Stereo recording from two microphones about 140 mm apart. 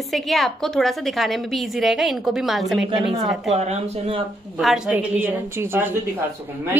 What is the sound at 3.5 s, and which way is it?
Speech, 50° right (ahead or behind).